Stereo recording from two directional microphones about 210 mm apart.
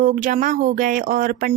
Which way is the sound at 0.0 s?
40° right (ahead or behind).